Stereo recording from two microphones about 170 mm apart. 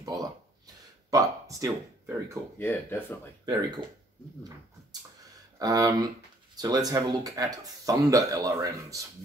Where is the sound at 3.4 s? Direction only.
25° right (ahead or behind).